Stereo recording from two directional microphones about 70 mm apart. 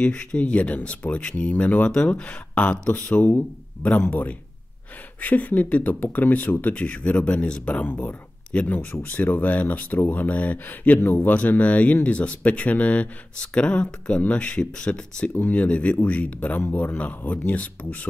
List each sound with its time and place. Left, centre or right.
0.0 s speech: centre
6.7 s speech: centre